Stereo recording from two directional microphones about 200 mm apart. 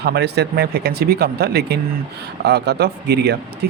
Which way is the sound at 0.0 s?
55° right (ahead or behind).